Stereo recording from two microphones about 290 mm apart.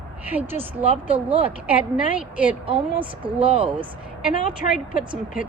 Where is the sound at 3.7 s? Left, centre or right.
Centre.